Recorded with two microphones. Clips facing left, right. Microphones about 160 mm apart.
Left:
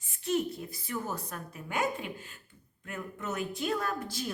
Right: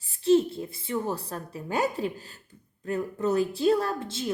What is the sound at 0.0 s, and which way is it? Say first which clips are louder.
A woman's voice: right 9 dB; 30° right (ahead or behind).